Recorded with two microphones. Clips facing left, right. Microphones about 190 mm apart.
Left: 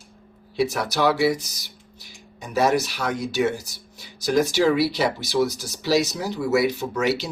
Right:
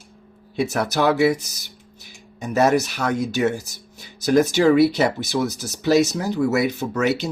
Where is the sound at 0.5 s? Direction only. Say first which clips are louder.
Right 2 dB; 50° right (ahead or behind).